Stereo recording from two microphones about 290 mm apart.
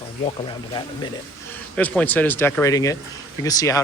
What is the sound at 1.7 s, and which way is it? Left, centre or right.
A man's voice, centre.